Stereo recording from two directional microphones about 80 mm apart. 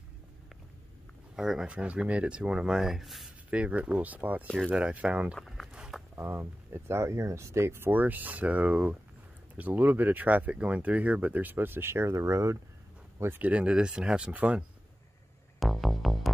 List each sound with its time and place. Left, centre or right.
1.3 s speech: centre
3.4 s speech: centre
5.7 s a sound: centre
6.1 s speech: right
13.5 s speech: centre
15.6 s music: centre